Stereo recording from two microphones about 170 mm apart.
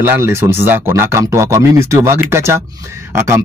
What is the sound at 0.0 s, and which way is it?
A man's voice, 15° right (ahead or behind).